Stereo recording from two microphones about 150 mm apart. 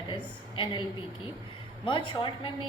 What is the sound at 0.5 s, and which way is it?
Speech, 35° left (ahead or behind).